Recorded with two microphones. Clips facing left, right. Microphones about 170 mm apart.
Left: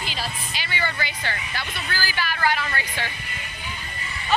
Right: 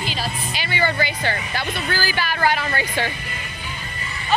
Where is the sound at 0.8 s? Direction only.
35° right (ahead or behind).